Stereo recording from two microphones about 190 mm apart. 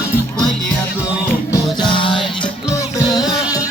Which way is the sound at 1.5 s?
25° left (ahead or behind).